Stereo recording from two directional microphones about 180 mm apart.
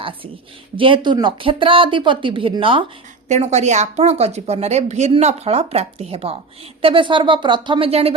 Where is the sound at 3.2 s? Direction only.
40° right (ahead or behind).